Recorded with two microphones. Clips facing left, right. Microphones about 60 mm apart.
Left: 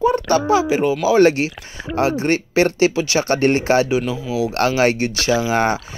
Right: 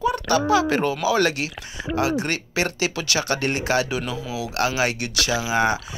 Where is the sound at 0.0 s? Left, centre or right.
Left.